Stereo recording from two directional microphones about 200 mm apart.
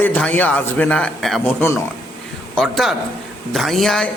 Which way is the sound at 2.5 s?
Centre (ahead or behind).